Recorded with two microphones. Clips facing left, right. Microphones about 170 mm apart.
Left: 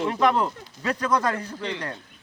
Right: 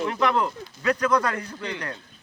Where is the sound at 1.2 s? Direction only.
25° left (ahead or behind).